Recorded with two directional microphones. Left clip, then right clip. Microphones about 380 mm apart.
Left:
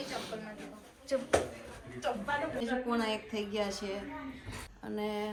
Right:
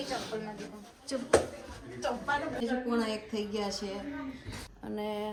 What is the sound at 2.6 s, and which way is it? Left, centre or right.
A woman's voice, centre.